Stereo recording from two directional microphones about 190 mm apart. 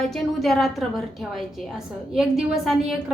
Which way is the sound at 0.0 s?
Centre (ahead or behind).